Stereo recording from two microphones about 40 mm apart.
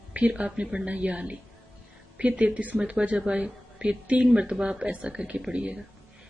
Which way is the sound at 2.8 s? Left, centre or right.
Right.